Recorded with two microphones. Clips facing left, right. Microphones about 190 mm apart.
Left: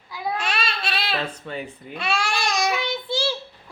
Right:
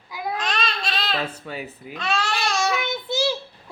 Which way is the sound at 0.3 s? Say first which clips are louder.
Right 1 dB; 10° left (ahead or behind).